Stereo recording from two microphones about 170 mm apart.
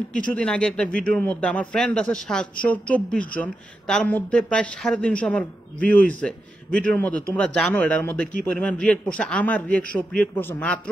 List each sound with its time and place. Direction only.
0.3 s a man's voice: 5° left (ahead or behind)